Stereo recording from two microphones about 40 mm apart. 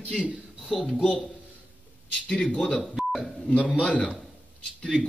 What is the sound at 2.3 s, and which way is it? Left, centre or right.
Speech, left.